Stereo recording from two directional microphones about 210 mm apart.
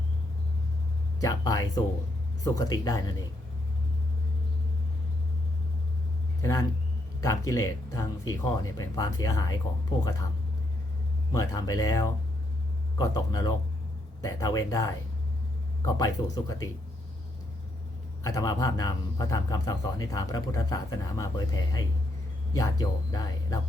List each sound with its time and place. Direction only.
1.2 s speech: 15° left (ahead or behind)
6.4 s speech: 15° left (ahead or behind)
11.3 s speech: 15° left (ahead or behind)
18.2 s speech: 15° left (ahead or behind)